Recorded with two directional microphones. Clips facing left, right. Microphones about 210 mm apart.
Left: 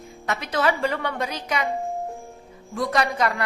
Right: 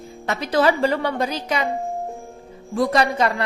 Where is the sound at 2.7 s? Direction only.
30° right (ahead or behind).